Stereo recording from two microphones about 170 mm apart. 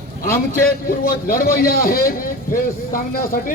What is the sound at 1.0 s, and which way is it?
A man's voice, 60° left (ahead or behind).